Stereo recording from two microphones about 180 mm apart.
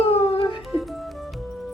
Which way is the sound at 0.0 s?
35° left (ahead or behind).